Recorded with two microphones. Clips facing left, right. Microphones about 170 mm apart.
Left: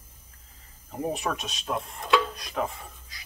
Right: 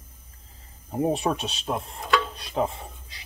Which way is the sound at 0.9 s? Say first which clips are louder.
Right 5 dB; 30° right (ahead or behind).